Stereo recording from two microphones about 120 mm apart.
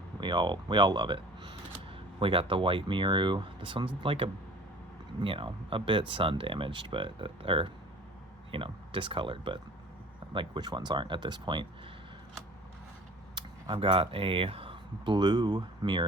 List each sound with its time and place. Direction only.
0.2 s speech: 40° right (ahead or behind)
13.3 s speech: 45° right (ahead or behind)